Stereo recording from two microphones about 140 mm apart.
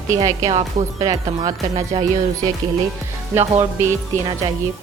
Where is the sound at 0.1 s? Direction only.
25° right (ahead or behind).